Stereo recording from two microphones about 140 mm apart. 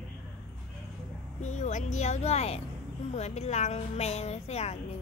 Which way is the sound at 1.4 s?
60° left (ahead or behind).